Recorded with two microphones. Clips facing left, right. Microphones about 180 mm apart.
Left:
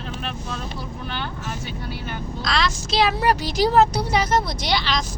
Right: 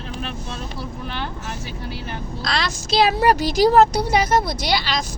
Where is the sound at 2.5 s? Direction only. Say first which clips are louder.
Even; 35° right (ahead or behind).